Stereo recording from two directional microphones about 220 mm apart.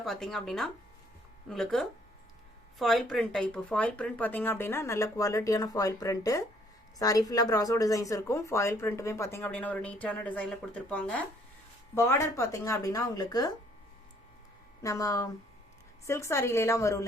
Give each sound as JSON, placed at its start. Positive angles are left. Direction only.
{"t": 0.0, "sound": "speech", "side_deg": 0}
{"t": 14.8, "sound": "speech", "side_deg": 15}